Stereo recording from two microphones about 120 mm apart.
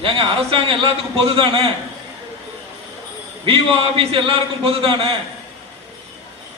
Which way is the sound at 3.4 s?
50° right (ahead or behind).